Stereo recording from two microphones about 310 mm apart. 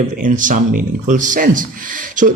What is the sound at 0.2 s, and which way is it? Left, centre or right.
Speech, right.